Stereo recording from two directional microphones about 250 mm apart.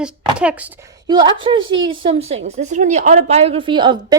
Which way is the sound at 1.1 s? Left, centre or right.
Centre.